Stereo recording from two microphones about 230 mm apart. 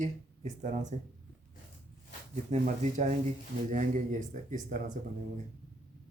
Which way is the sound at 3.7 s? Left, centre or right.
Right.